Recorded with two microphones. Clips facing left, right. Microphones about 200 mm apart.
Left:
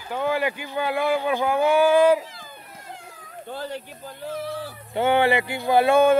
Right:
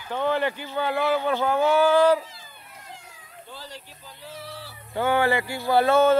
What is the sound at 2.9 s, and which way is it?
Cat, 55° left (ahead or behind).